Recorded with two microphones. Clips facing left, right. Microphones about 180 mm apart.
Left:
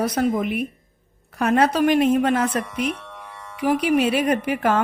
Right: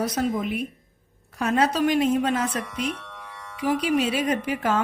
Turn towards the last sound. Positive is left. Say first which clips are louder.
# left 4 dB
turn(degrees=60)  # may be behind; listen again after turning